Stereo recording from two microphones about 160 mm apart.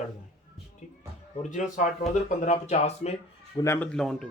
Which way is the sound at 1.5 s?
50° left (ahead or behind).